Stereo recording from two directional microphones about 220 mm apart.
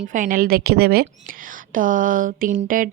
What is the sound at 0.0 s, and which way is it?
A woman's voice, 35° right (ahead or behind).